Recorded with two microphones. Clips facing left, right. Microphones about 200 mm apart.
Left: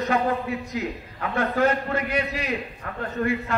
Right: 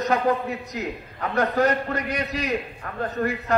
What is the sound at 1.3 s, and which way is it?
A man's voice, 40° right (ahead or behind).